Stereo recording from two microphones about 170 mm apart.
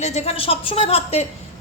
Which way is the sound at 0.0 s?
40° left (ahead or behind).